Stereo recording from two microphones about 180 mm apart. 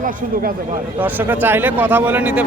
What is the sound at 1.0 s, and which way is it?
A man's voice, 10° right (ahead or behind).